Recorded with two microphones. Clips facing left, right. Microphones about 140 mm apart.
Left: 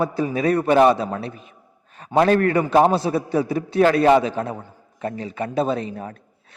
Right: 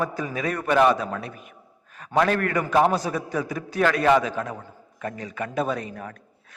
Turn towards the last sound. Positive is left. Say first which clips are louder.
# left 3 dB
turn(degrees=30)  # may be behind; listen again after turning